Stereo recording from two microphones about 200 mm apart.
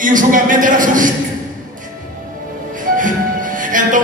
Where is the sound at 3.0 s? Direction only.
40° right (ahead or behind).